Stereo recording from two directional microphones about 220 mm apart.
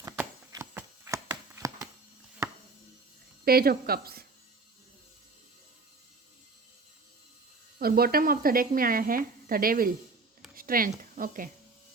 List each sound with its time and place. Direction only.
0.0 s a sound: 15° right (ahead or behind)
3.4 s speech: 45° right (ahead or behind)
7.8 s speech: 45° right (ahead or behind)